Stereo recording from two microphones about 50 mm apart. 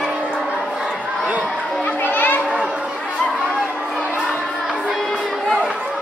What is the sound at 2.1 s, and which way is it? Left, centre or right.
Children playing, left.